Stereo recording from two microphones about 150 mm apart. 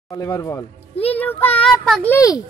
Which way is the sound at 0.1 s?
25° left (ahead or behind).